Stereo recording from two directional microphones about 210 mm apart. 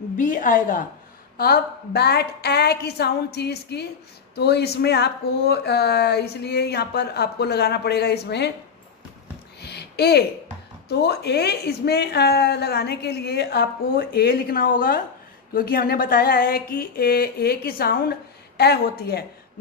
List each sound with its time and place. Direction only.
0.2 s a woman's voice: 40° left (ahead or behind)
9.6 s a sound: 50° left (ahead or behind)
10.9 s speech: 50° left (ahead or behind)